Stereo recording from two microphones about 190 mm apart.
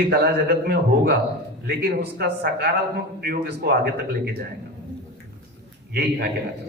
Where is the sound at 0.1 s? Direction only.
60° right (ahead or behind).